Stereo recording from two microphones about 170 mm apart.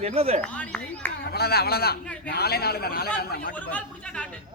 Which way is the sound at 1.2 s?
65° left (ahead or behind).